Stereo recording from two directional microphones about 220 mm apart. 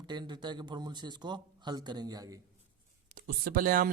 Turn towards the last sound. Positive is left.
turn(degrees=-40)  # may be behind; listen again after turning